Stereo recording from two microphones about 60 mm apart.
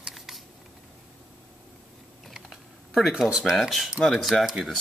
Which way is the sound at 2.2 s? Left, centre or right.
Centre.